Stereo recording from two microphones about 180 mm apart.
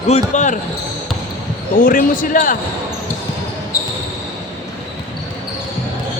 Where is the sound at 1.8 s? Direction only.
50° left (ahead or behind).